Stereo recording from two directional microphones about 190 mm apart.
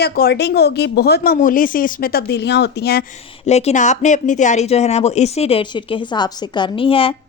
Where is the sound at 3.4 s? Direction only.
35° left (ahead or behind).